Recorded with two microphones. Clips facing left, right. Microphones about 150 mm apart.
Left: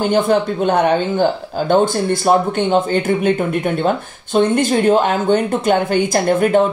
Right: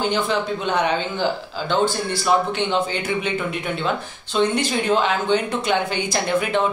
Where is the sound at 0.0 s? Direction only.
50° left (ahead or behind).